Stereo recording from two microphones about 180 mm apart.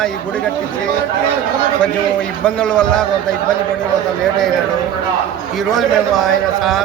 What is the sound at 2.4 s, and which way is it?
Speech, 5° left (ahead or behind).